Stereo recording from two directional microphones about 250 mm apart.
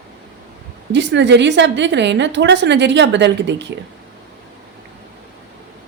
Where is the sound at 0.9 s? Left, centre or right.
Right.